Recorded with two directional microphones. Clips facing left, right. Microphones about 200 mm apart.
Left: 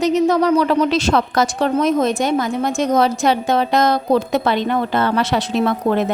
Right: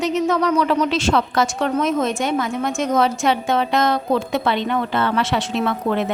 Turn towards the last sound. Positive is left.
turn(degrees=40)  # may be behind; listen again after turning